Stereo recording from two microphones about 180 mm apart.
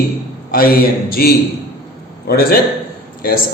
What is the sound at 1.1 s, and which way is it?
A man's voice, 60° left (ahead or behind).